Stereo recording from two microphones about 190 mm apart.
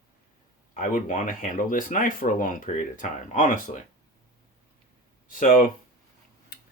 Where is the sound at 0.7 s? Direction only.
45° left (ahead or behind).